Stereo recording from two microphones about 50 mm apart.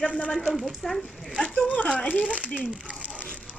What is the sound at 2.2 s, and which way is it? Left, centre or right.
Speech, right.